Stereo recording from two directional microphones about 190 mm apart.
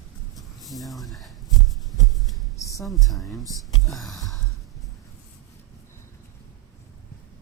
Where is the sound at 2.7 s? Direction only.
Centre (ahead or behind).